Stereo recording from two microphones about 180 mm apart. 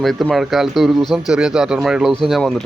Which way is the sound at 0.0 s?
Centre (ahead or behind).